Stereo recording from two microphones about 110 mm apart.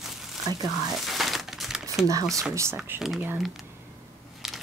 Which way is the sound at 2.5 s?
25° right (ahead or behind).